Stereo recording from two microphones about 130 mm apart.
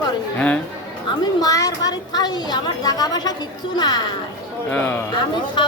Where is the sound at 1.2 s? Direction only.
30° left (ahead or behind).